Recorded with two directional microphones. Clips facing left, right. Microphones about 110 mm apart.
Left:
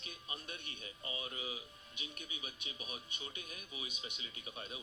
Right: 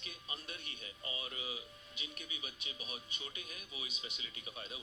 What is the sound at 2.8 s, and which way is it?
Speech, 30° left (ahead or behind).